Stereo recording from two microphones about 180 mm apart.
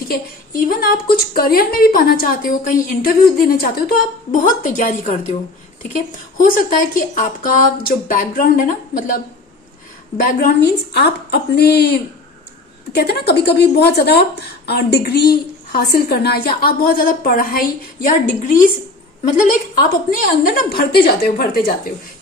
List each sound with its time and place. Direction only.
0.1 s a woman's voice: 55° left (ahead or behind)
10.2 s a woman's voice: 60° left (ahead or behind)